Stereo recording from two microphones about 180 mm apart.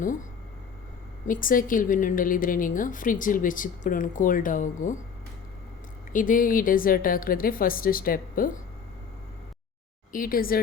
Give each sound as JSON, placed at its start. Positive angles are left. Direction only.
{"t": 1.3, "sound": "a woman's voice", "side_deg": 50}
{"t": 6.1, "sound": "a woman's voice", "side_deg": 50}
{"t": 10.1, "sound": "a woman's voice", "side_deg": 50}